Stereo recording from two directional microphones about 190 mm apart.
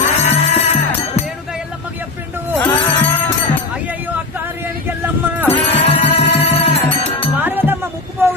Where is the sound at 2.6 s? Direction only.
10° left (ahead or behind).